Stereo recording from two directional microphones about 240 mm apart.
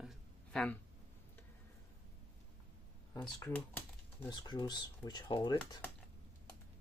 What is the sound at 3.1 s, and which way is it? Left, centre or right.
Speech, centre.